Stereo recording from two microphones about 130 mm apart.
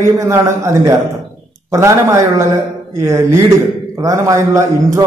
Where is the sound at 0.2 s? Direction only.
20° right (ahead or behind).